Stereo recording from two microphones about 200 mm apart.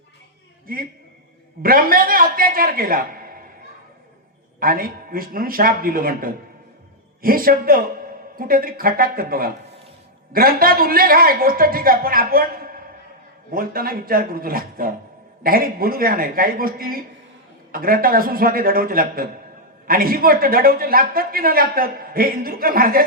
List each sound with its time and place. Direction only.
0.7 s a man's voice: 45° right (ahead or behind)
4.6 s a man's voice: 45° right (ahead or behind)